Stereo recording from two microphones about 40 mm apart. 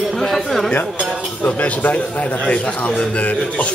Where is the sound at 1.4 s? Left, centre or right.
Left.